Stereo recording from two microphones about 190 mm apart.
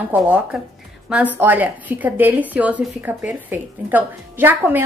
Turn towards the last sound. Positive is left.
turn(degrees=-10)  # may be behind; listen again after turning